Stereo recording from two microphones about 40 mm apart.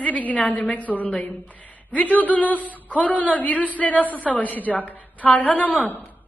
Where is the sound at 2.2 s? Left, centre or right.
Left.